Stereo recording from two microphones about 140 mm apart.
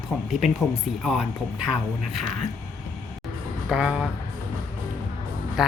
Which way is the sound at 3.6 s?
5° right (ahead or behind).